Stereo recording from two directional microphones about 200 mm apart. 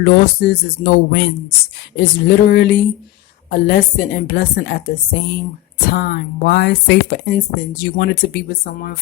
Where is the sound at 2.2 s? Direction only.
50° left (ahead or behind).